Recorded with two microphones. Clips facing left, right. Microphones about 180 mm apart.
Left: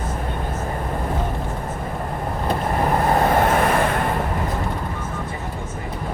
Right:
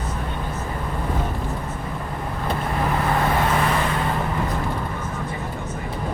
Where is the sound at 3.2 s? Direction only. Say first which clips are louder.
Left 4 dB; 50° left (ahead or behind).